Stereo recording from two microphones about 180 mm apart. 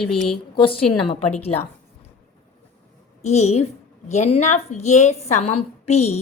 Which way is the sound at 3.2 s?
40° left (ahead or behind).